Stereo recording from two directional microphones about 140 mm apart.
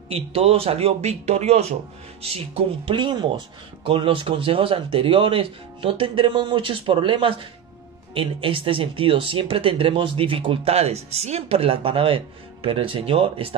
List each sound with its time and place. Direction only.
0.1 s speech: 45° right (ahead or behind)